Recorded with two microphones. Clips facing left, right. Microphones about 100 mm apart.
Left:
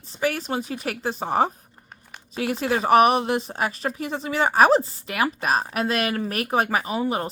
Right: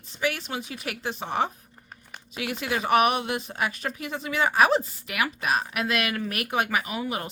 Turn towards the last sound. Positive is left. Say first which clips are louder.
# left 6 dB
turn(degrees=35)  # may be behind; listen again after turning